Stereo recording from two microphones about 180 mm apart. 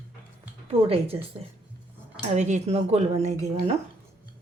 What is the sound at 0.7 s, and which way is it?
Speech, 35° right (ahead or behind).